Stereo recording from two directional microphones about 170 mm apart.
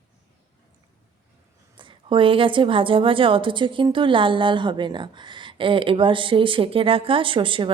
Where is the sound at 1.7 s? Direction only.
30° right (ahead or behind).